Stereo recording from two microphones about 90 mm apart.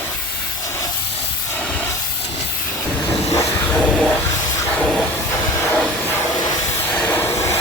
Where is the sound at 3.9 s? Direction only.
5° left (ahead or behind).